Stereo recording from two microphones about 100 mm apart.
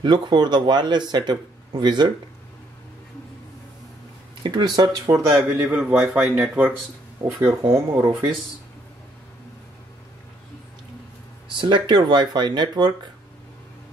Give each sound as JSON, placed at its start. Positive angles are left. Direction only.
{"t": 0.0, "sound": "speech", "side_deg": -45}
{"t": 4.4, "sound": "speech", "side_deg": -50}
{"t": 5.4, "sound": "speech", "side_deg": -10}
{"t": 7.2, "sound": "speech", "side_deg": -30}
{"t": 11.4, "sound": "speech", "side_deg": -50}